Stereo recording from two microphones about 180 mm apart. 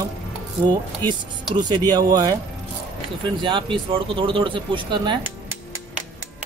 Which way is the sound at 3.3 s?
25° right (ahead or behind).